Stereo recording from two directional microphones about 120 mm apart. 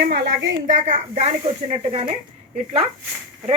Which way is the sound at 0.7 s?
80° right.